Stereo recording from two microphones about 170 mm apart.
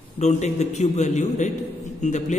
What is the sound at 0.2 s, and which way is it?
A man's voice, 40° left (ahead or behind).